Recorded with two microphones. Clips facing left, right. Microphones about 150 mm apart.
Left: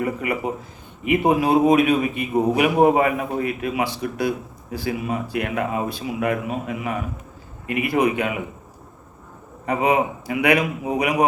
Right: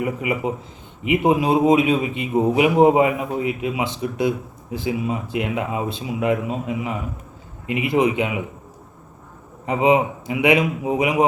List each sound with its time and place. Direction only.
0.0 s a man's voice: 15° right (ahead or behind)
9.6 s a man's voice: 20° right (ahead or behind)